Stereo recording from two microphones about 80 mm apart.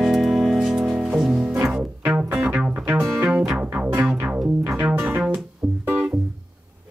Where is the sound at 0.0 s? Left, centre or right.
Centre.